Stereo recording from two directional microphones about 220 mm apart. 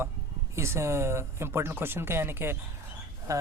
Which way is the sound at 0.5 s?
10° right (ahead or behind).